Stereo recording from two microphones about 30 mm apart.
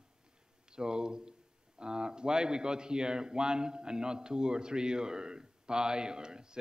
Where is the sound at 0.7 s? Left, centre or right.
Right.